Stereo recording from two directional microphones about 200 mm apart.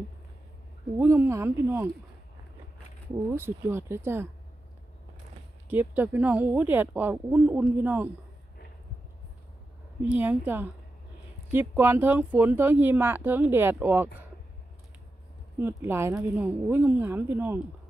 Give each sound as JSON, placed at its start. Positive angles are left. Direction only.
{"t": 0.9, "sound": "speech", "side_deg": -15}
{"t": 3.3, "sound": "speech", "side_deg": -10}
{"t": 5.7, "sound": "speech", "side_deg": -10}
{"t": 10.0, "sound": "speech", "side_deg": -10}
{"t": 15.6, "sound": "speech", "side_deg": -10}